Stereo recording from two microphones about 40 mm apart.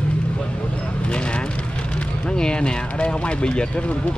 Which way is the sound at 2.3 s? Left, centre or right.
Left.